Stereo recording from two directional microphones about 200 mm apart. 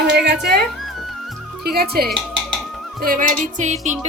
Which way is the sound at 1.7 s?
50° right (ahead or behind).